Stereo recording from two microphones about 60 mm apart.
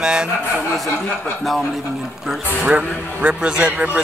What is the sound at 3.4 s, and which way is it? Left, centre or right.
Speech, centre.